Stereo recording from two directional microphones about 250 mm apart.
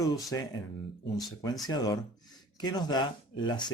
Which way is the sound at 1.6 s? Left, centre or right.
Centre.